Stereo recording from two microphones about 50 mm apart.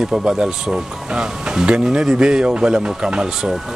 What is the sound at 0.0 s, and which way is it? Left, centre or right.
Speech, centre.